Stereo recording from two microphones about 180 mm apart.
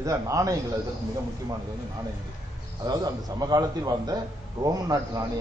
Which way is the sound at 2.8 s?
20° right (ahead or behind).